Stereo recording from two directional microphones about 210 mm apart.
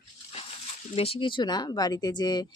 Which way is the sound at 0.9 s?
25° left (ahead or behind).